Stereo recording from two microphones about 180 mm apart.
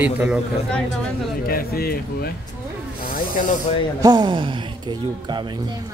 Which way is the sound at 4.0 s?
20° right (ahead or behind).